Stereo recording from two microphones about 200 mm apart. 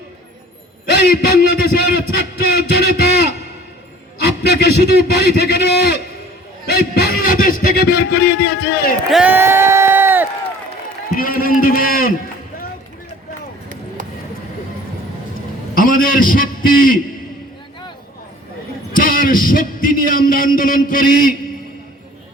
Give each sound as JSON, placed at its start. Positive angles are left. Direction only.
{"t": 0.9, "sound": "music", "side_deg": 55}
{"t": 2.6, "sound": "a man's voice", "side_deg": 55}
{"t": 9.0, "sound": "a sound", "side_deg": -5}
{"t": 11.2, "sound": "speech", "side_deg": 45}
{"t": 13.7, "sound": "a sound", "side_deg": -40}
{"t": 15.7, "sound": "a man's voice", "side_deg": 45}
{"t": 18.9, "sound": "music", "side_deg": 45}